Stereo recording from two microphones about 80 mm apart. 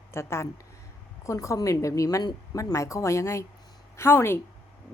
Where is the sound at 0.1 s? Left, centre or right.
Left.